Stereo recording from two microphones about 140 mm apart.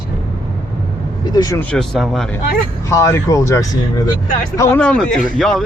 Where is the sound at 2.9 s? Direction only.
20° left (ahead or behind).